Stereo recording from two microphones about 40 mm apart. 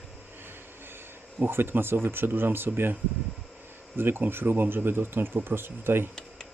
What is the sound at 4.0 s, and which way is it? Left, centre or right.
Speech, right.